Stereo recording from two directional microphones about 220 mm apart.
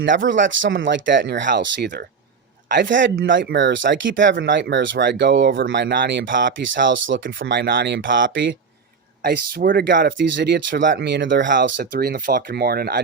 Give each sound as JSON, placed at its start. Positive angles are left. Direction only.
{"t": 0.0, "sound": "speech", "side_deg": -55}
{"t": 9.2, "sound": "speech", "side_deg": -40}
{"t": 11.6, "sound": "speech", "side_deg": -45}